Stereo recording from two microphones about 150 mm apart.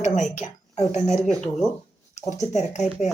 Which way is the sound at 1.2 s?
5° left (ahead or behind).